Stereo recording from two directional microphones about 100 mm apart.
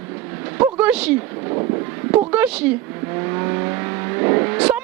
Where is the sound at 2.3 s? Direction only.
10° right (ahead or behind).